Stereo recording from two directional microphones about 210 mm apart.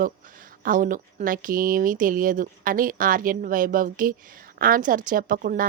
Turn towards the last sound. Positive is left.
turn(degrees=-40)  # may be behind; listen again after turning